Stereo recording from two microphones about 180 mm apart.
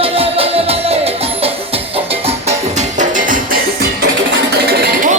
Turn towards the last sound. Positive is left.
turn(degrees=-65)  # may be behind; listen again after turning